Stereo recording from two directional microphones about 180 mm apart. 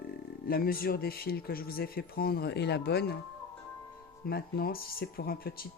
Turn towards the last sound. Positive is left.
turn(degrees=55)  # may be behind; listen again after turning